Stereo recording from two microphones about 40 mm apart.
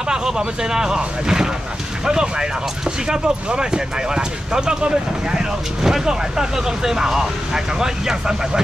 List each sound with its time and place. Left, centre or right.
0.1 s speech: centre